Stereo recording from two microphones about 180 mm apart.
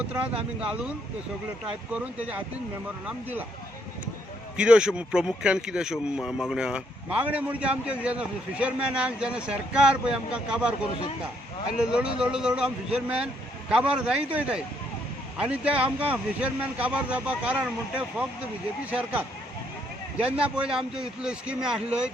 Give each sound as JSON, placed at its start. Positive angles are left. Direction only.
{"t": 0.6, "sound": "speech", "side_deg": -5}
{"t": 4.5, "sound": "speech", "side_deg": -5}
{"t": 11.8, "sound": "speech", "side_deg": -5}